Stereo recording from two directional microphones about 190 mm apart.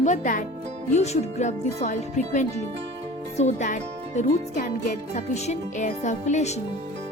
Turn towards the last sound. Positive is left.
turn(degrees=35)  # may be behind; listen again after turning